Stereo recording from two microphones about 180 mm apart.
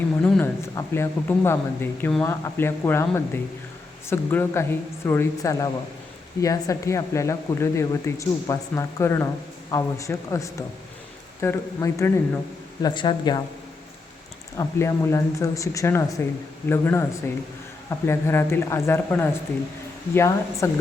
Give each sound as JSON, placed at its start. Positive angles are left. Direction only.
{"t": 0.2, "sound": "speech", "side_deg": 10}
{"t": 12.8, "sound": "speech", "side_deg": 25}
{"t": 14.6, "sound": "speech", "side_deg": 15}